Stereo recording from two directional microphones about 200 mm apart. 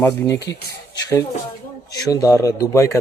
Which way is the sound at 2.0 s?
15° left (ahead or behind).